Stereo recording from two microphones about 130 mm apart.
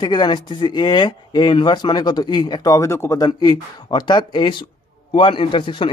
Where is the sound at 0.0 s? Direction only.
35° left (ahead or behind).